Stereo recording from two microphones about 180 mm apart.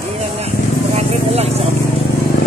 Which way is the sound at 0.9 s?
35° right (ahead or behind).